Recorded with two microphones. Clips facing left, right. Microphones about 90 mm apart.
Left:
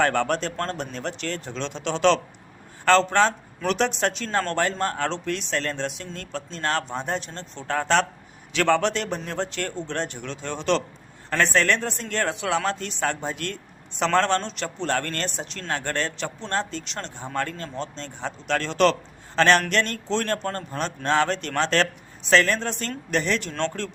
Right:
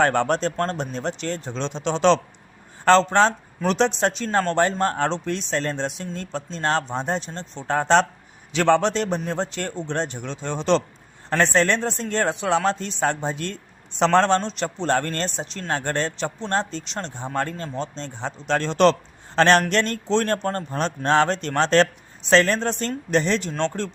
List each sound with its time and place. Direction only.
0.0 s a man's voice: 30° right (ahead or behind)